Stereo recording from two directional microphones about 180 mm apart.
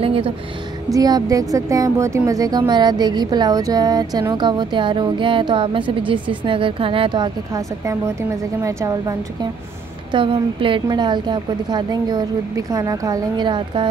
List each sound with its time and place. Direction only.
0.0 s a sound: 30° right (ahead or behind)
0.9 s a woman's voice: 20° right (ahead or behind)
10.1 s a woman's voice: 30° right (ahead or behind)